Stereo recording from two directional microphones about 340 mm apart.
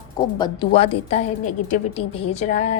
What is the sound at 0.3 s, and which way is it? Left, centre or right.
A woman's voice, centre.